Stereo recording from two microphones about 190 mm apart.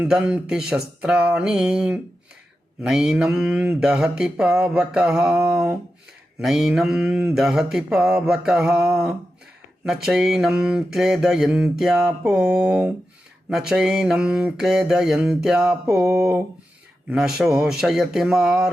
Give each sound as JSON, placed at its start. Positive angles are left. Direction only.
{"t": 0.0, "sound": "mantra", "side_deg": -5}
{"t": 6.4, "sound": "mantra", "side_deg": 0}
{"t": 16.0, "sound": "speech", "side_deg": -15}
{"t": 17.1, "sound": "mantra", "side_deg": -5}